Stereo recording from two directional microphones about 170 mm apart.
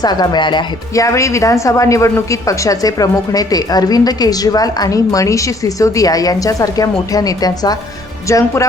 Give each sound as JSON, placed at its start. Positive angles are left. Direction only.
{"t": 0.0, "sound": "speech", "side_deg": 25}